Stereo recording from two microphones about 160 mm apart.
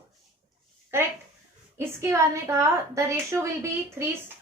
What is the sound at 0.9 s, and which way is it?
A woman's voice, 15° right (ahead or behind).